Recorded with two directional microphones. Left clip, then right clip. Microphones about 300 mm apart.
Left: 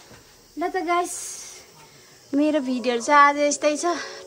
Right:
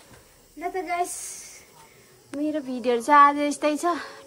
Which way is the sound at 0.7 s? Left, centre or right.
Centre.